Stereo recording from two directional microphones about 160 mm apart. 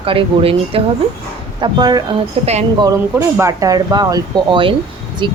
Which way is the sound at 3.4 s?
20° right (ahead or behind).